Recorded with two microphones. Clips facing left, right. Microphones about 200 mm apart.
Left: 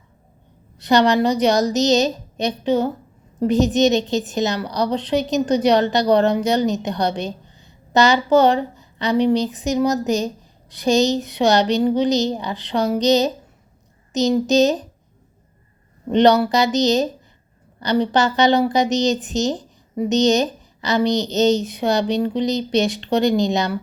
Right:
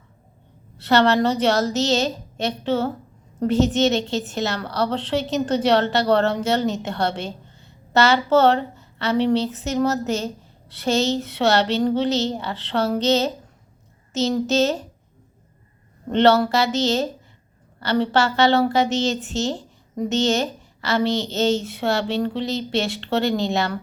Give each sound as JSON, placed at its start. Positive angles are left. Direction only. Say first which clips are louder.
{"t": 0.8, "sound": "a woman's voice", "louder": "left 2 dB", "side_deg": 15}
{"t": 16.1, "sound": "a woman's voice", "louder": "left 2 dB", "side_deg": 15}